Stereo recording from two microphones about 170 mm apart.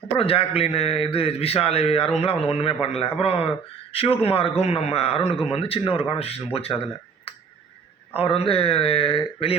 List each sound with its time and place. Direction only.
0.2 s a man's voice: 35° left (ahead or behind)
8.1 s a man's voice: 35° left (ahead or behind)